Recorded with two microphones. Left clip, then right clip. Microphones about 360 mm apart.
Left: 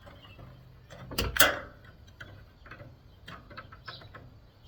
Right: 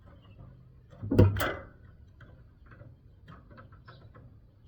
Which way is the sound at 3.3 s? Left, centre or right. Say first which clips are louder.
Left 8 dB; centre.